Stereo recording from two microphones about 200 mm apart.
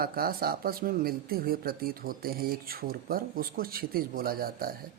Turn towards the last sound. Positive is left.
turn(degrees=-45)  # may be behind; listen again after turning